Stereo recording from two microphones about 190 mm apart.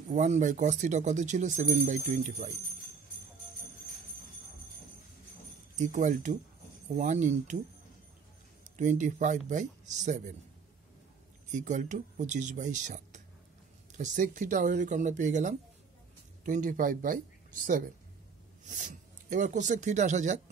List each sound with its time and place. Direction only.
0.1 s speech: 40° right (ahead or behind)
5.8 s speech: 40° right (ahead or behind)
8.7 s speech: 40° right (ahead or behind)
11.5 s speech: 40° right (ahead or behind)